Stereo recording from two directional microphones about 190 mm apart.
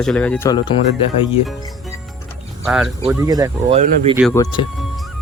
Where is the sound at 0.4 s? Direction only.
25° left (ahead or behind).